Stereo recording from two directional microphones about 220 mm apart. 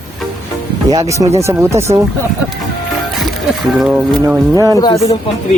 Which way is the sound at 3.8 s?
5° right (ahead or behind).